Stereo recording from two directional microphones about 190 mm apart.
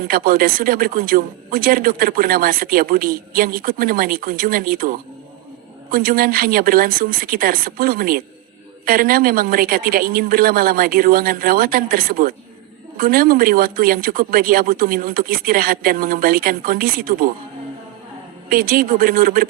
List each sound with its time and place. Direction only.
0.1 s a man's voice: 50° right (ahead or behind)
18.4 s a man's voice: 50° right (ahead or behind)